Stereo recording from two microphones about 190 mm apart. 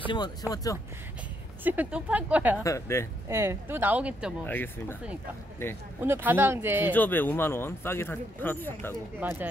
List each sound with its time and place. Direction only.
0.0 s speech: 25° left (ahead or behind)
1.6 s speech: 10° right (ahead or behind)
2.6 s speech: 15° left (ahead or behind)
3.3 s speech: 10° right (ahead or behind)
4.5 s speech: 10° left (ahead or behind)
5.9 s speech: 10° right (ahead or behind)
6.9 s speech: 10° left (ahead or behind)
9.2 s speech: 10° right (ahead or behind)